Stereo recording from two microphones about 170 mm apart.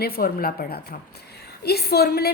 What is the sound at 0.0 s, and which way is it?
A woman's voice, 60° left (ahead or behind).